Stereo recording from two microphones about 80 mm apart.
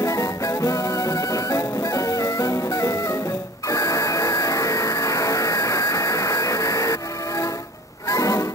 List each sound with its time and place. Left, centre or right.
0.0 s music: left
3.6 s a sound: left
8.1 s music: left